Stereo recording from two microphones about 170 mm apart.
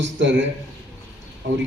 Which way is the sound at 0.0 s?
90° right.